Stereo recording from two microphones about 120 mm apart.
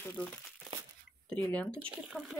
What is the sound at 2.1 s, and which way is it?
Speech, centre (ahead or behind).